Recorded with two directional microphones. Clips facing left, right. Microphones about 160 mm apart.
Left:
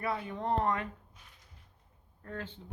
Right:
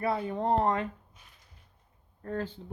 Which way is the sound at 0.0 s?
35° right (ahead or behind).